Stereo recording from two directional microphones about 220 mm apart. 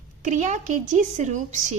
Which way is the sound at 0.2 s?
35° right (ahead or behind).